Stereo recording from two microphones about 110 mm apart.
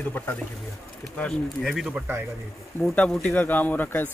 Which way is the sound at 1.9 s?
15° right (ahead or behind).